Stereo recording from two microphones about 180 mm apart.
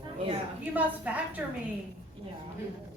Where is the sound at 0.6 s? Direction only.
10° right (ahead or behind).